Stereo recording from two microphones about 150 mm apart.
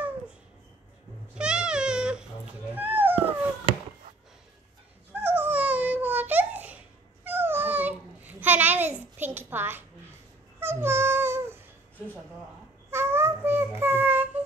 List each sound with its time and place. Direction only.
1.4 s a sound: 5° right (ahead or behind)
5.1 s babbling: 10° right (ahead or behind)
10.6 s music: 15° right (ahead or behind)
12.9 s child singing: 15° right (ahead or behind)